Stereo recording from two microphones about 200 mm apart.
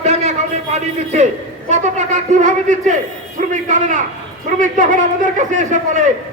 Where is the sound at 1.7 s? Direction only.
35° right (ahead or behind).